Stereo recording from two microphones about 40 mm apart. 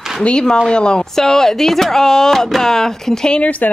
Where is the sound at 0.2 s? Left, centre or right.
Left.